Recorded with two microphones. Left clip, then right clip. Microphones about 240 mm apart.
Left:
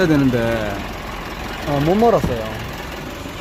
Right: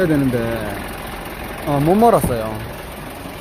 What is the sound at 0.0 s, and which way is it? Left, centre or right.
Speech, centre.